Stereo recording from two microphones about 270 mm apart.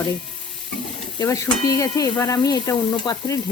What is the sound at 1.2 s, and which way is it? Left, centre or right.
Stir, centre.